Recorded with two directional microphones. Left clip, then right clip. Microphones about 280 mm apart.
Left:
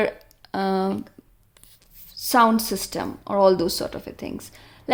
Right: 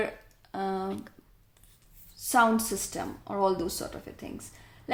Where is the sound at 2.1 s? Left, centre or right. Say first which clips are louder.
Left 6 dB; left.